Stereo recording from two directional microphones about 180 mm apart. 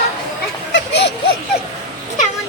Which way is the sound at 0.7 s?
75° left (ahead or behind).